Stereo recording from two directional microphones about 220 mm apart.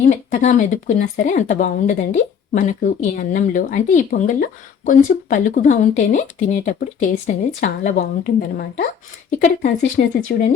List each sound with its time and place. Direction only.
0.0 s speech: 35° left (ahead or behind)